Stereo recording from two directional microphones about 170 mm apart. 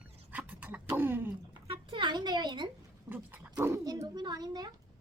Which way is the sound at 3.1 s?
10° right (ahead or behind).